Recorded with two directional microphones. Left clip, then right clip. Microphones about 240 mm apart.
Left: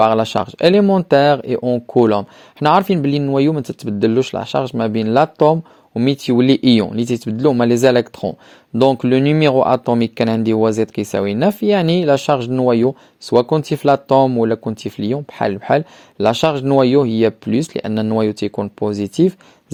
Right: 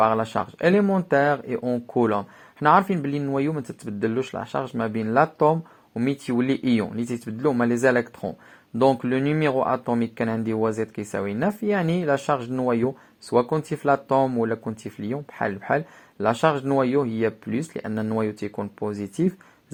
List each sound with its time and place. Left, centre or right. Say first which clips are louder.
0.0 s speech: left 7 dB; left